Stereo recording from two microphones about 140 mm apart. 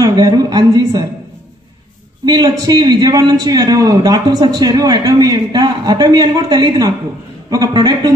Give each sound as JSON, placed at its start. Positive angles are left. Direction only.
{"t": 0.0, "sound": "a man's voice", "side_deg": -25}
{"t": 2.2, "sound": "a man's voice", "side_deg": -30}